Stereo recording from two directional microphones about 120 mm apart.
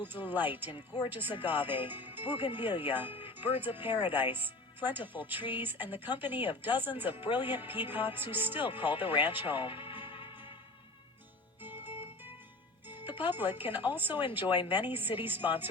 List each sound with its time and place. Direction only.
0.0 s speech: 15° right (ahead or behind)
9.6 s speech: 45° left (ahead or behind)
10.1 s music: 45° left (ahead or behind)
11.6 s music: 15° right (ahead or behind)
12.9 s speech: 15° right (ahead or behind)